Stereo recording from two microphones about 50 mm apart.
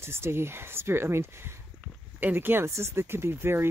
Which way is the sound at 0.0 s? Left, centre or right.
Right.